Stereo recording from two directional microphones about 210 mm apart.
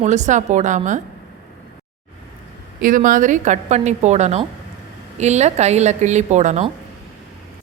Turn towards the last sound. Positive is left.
turn(degrees=-35)  # may be behind; listen again after turning